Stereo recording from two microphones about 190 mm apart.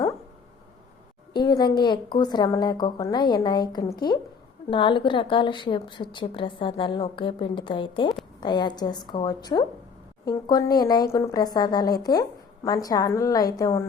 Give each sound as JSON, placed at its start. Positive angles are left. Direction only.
{"t": 1.3, "sound": "a woman's voice", "side_deg": 25}